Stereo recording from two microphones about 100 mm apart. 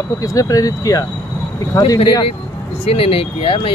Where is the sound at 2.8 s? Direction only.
70° left (ahead or behind).